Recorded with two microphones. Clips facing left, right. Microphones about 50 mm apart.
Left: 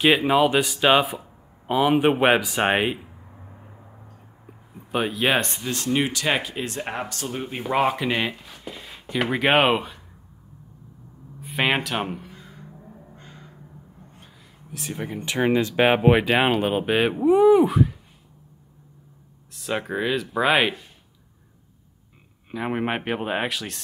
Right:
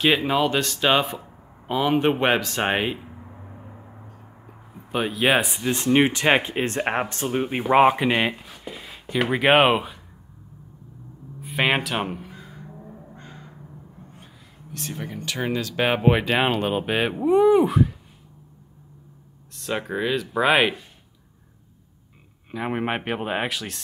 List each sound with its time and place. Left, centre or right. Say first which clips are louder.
0.0 s speech: left 2 dB; centre
3.0 s a sound: right 4 dB; right
4.9 s speech: right 1 dB; centre
5.7 s speech: right 6 dB; right
8.5 s speech: right 1 dB; centre
11.4 s crow: right 1 dB; centre
14.1 s a sound: right 2 dB; centre
15.1 s speech: left 6 dB; left; by 17.9 s centre
19.5 s speech: even; centre
22.5 s speech: even; centre